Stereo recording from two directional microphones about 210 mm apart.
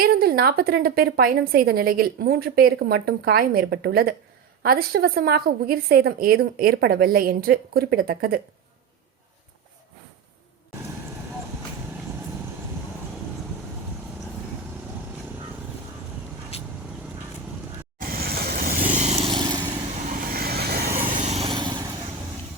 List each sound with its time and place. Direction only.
0.0 s a woman's voice: 45° right (ahead or behind)
16.5 s vehicle: 30° left (ahead or behind)
18.0 s vehicle: 45° right (ahead or behind); by 19.6 s 20° right (ahead or behind)
20.3 s vehicle: 45° right (ahead or behind)
21.2 s vehicle: 30° right (ahead or behind)